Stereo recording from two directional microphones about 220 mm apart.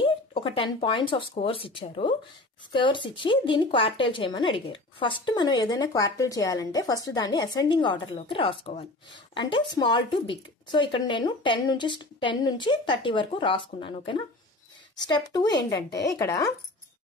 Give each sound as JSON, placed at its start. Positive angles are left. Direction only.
{"t": 0.0, "sound": "speech", "side_deg": 25}